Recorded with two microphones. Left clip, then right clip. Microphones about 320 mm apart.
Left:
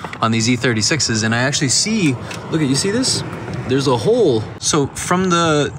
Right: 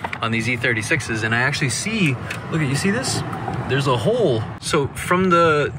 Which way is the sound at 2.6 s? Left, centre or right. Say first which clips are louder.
Left 5 dB; left.